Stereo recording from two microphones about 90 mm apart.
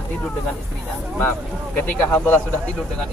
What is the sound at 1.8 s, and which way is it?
Speech, 20° left (ahead or behind).